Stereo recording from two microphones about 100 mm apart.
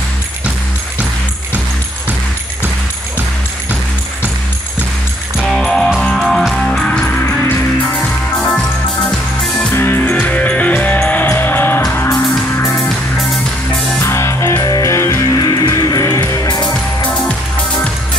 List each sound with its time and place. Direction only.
5.4 s music: centre (ahead or behind); by 11.8 s 20° left (ahead or behind)
14.0 s music: 30° left (ahead or behind)
15.3 s music: 40° left (ahead or behind)